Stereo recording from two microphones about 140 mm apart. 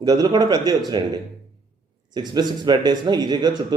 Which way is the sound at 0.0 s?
30° right (ahead or behind).